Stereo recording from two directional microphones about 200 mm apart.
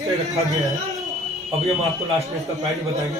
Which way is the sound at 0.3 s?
15° right (ahead or behind).